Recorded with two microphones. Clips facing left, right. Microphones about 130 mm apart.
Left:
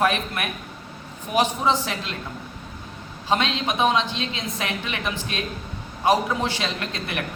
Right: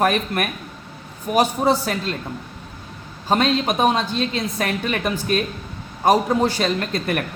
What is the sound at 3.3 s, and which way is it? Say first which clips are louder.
A man's voice: right 5 dB; 45° right (ahead or behind).